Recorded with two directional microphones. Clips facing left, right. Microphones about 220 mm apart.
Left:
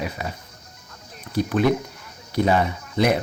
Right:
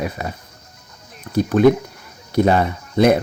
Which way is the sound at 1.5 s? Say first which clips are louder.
Right 8 dB; 45° right (ahead or behind).